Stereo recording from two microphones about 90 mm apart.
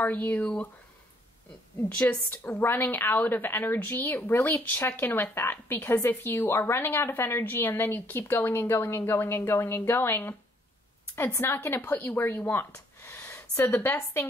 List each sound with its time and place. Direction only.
0.0 s speech: 20° left (ahead or behind)
1.8 s a woman's voice: 20° left (ahead or behind)